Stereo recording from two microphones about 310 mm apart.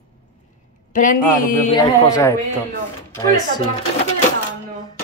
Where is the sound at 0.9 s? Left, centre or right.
Left.